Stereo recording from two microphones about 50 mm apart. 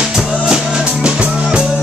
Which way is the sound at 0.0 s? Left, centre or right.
Centre.